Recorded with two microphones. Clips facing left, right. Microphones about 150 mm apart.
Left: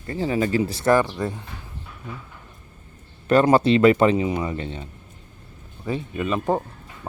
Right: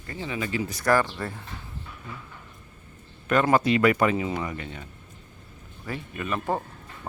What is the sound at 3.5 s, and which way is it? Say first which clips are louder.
Speech: left 4 dB; 30° left (ahead or behind).